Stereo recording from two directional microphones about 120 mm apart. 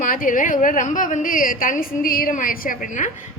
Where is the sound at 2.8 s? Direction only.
90° left.